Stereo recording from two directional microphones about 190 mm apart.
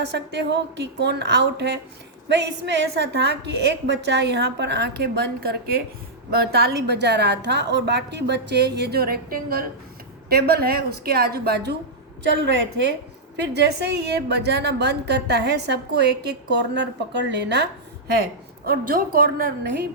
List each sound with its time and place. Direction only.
0.1 s a woman's voice: 65° right (ahead or behind)
18.1 s a woman's voice: 55° right (ahead or behind)